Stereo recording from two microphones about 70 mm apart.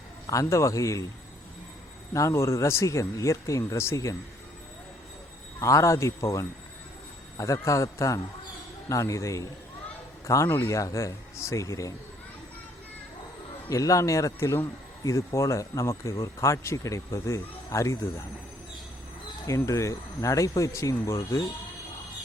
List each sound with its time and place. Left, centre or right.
0.3 s speech: left
2.1 s speech: left
5.6 s speech: left
13.7 s speech: left
19.5 s speech: left